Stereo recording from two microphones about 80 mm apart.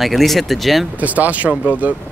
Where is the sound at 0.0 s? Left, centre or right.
Centre.